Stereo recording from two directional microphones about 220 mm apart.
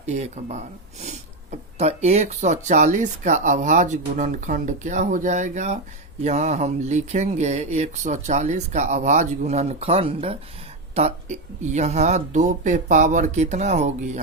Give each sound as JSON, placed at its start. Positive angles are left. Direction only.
{"t": 0.0, "sound": "speech", "side_deg": -30}